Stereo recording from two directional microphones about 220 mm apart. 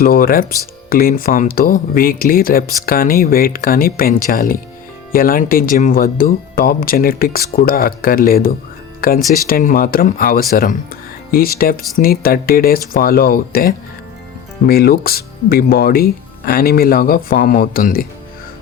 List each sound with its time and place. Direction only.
0.0 s speech: 40° left (ahead or behind)